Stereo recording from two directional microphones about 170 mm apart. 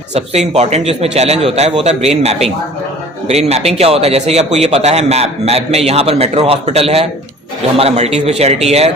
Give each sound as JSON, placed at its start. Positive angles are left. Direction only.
{"t": 0.1, "sound": "a man's voice", "side_deg": -40}